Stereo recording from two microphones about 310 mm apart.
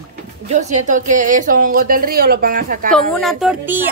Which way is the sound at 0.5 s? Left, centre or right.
Right.